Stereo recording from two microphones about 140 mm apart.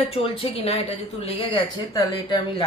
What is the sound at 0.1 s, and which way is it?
A woman's voice, 40° left (ahead or behind).